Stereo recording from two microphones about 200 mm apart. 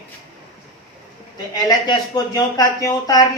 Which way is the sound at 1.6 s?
20° left (ahead or behind).